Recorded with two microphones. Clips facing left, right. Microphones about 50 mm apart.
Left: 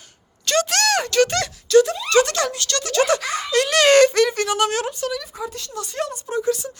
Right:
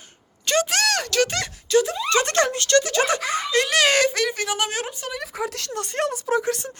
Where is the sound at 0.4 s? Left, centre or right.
Centre.